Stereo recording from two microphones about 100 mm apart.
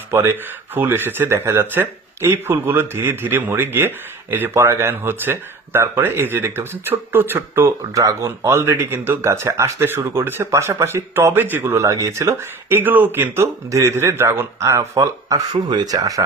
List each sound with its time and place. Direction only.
0.1 s speech: 25° right (ahead or behind)
7.9 s speech: 35° right (ahead or behind)
11.7 s speech: 30° right (ahead or behind)
15.5 s speech: 50° right (ahead or behind)